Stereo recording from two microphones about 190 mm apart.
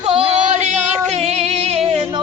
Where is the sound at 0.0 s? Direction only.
35° right (ahead or behind).